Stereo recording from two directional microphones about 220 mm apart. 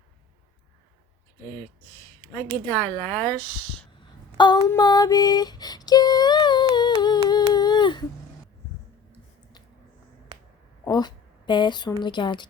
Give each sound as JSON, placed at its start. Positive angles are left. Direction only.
{"t": 2.7, "sound": "speech", "side_deg": 5}
{"t": 4.4, "sound": "female singing", "side_deg": 20}
{"t": 10.8, "sound": "a woman's voice", "side_deg": 20}